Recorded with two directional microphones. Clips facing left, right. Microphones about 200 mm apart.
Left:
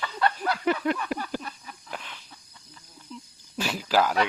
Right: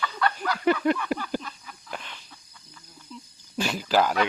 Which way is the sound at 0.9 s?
Centre (ahead or behind).